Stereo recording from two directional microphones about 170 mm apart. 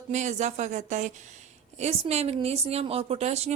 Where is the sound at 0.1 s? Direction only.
45° right (ahead or behind).